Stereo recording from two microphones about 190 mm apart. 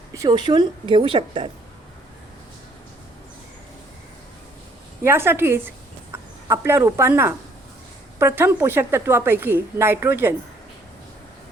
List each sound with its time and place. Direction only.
0.1 s a woman's voice: 20° right (ahead or behind)
5.0 s a woman's voice: 10° right (ahead or behind)